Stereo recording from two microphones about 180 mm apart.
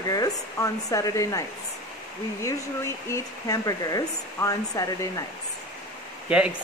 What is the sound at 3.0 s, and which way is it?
Speech, 20° left (ahead or behind).